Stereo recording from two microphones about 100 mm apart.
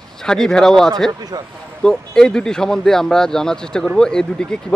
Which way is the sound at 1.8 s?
5° left (ahead or behind).